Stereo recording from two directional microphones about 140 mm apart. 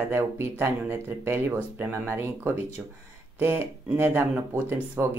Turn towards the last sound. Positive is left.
turn(degrees=-15)  # may be behind; listen again after turning